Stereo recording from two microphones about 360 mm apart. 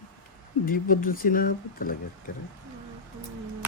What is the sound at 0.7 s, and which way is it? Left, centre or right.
Speech, left.